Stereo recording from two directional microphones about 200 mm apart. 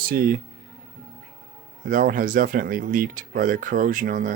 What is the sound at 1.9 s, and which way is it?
Speech, 45° right (ahead or behind).